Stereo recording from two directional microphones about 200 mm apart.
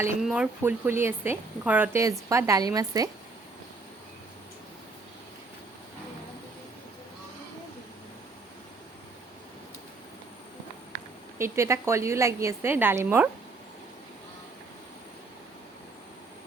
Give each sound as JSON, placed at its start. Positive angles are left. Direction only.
{"t": 0.2, "sound": "a woman's voice", "side_deg": -5}
{"t": 11.3, "sound": "a woman's voice", "side_deg": -15}